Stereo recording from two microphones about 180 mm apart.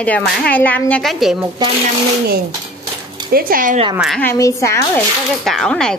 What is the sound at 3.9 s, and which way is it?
Speech, centre (ahead or behind).